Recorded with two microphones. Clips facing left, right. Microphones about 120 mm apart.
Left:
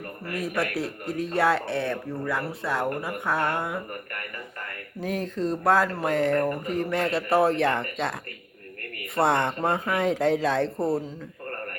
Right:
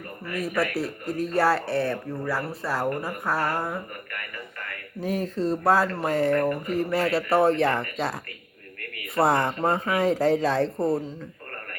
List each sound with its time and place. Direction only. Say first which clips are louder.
0.3 s speech: right 2 dB; centre (ahead or behind)
4.9 s speech: right 2 dB; centre (ahead or behind)
9.1 s speech: right 1 dB; centre (ahead or behind)